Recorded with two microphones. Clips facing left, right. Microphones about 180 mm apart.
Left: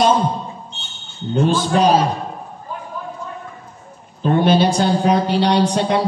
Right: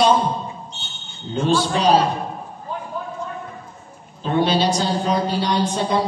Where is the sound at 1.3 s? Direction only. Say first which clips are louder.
Left 3 dB; 45° left (ahead or behind).